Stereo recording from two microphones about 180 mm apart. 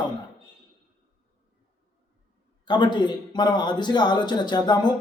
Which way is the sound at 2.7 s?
25° left (ahead or behind).